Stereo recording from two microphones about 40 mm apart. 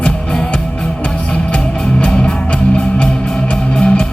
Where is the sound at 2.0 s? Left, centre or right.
Left.